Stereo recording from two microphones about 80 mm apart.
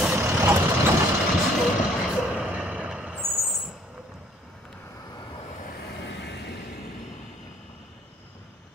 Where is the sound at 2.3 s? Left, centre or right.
Centre.